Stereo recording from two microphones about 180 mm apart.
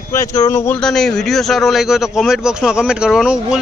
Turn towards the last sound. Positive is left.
turn(degrees=-5)  # may be behind; listen again after turning